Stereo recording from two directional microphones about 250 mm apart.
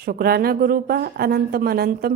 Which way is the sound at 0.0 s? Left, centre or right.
Right.